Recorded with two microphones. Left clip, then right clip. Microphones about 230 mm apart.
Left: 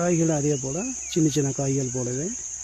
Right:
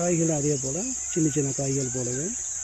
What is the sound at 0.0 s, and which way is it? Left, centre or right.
Speech, left.